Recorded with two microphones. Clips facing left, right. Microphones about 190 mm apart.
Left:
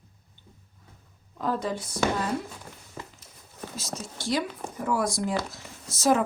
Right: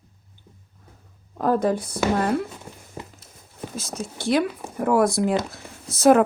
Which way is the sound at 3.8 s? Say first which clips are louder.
Right 5 dB; 55° right (ahead or behind).